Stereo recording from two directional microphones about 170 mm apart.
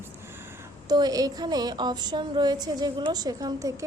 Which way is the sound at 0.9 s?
25° right (ahead or behind).